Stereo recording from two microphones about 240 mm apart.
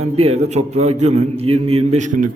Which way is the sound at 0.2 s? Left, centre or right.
Right.